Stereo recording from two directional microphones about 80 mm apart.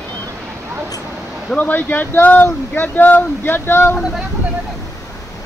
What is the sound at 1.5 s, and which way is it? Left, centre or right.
Speech, left.